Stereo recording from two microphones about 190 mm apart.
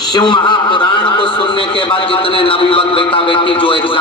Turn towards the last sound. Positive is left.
turn(degrees=25)  # may be behind; listen again after turning